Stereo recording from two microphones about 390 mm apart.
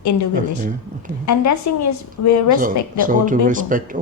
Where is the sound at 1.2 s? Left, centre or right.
Left.